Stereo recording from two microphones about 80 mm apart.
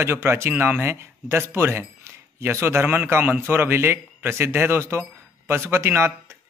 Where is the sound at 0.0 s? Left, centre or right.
Right.